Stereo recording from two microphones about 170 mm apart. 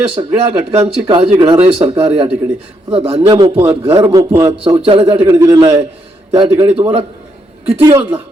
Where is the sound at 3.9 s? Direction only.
30° right (ahead or behind).